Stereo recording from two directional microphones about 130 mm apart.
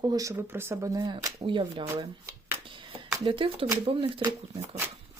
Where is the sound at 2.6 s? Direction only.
40° right (ahead or behind).